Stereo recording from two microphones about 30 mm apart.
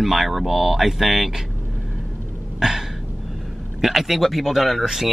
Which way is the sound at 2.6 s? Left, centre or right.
Right.